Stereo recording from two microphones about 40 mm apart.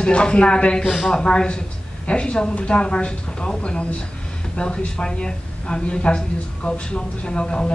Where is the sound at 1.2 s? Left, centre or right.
Centre.